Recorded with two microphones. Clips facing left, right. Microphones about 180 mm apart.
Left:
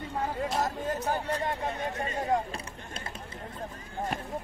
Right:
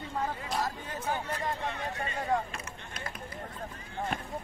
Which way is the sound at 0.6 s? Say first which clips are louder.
Left 3 dB; 40° left (ahead or behind).